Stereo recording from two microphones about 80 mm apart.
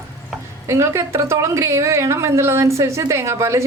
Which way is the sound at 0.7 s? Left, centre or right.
Right.